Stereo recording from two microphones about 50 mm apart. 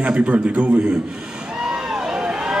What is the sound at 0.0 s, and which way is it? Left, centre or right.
A man's voice, right.